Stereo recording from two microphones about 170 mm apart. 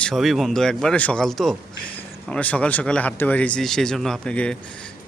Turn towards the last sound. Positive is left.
turn(degrees=5)  # may be behind; listen again after turning